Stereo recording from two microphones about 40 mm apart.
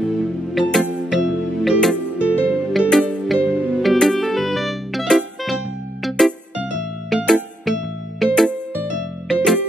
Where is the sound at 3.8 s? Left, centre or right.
Centre.